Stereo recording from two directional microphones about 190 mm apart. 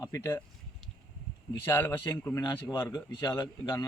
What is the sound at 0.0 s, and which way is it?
Speech, 15° left (ahead or behind).